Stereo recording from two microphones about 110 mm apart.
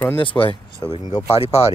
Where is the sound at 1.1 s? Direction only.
75° left (ahead or behind).